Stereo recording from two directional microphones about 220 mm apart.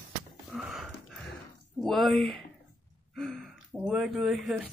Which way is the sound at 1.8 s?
Centre (ahead or behind).